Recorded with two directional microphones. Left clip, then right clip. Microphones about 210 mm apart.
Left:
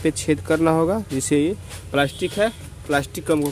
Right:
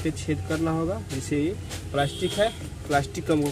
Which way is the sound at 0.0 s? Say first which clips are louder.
Left 8 dB; 40° left (ahead or behind).